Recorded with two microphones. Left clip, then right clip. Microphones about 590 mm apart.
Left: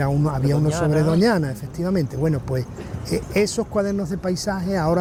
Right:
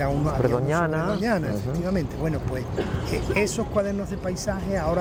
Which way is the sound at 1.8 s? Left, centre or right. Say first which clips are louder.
Left 7 dB; left.